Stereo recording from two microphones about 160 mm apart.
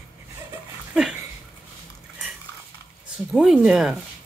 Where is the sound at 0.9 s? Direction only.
5° right (ahead or behind).